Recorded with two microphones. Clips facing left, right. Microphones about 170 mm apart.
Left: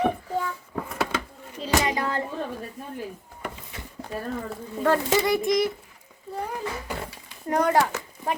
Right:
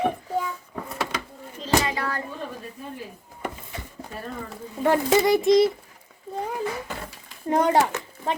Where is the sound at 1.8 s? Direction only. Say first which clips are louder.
Left 2 dB; 20° left (ahead or behind).